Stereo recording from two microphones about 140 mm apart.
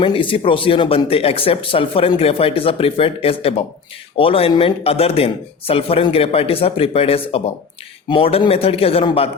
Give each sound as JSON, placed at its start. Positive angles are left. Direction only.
{"t": 0.0, "sound": "speech", "side_deg": 40}